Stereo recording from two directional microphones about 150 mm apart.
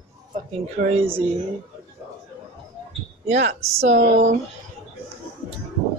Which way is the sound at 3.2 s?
50° right (ahead or behind).